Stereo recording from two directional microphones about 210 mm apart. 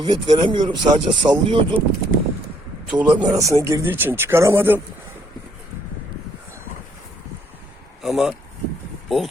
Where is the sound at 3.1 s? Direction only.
10° right (ahead or behind).